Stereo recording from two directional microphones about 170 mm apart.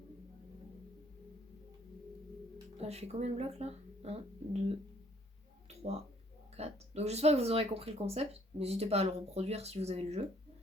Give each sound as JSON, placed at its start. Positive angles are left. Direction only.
{"t": 2.8, "sound": "speech", "side_deg": -40}
{"t": 5.6, "sound": "a sound", "side_deg": -40}
{"t": 6.6, "sound": "speech", "side_deg": -40}